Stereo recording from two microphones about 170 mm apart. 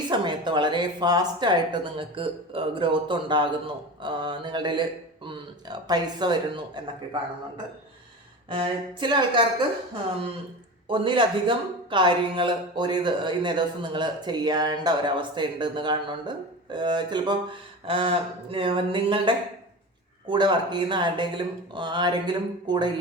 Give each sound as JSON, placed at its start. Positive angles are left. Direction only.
{"t": 0.1, "sound": "a woman's voice", "side_deg": -25}
{"t": 10.8, "sound": "a woman's voice", "side_deg": -30}